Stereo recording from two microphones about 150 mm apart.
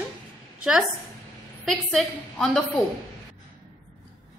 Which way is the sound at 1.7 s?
5° left (ahead or behind).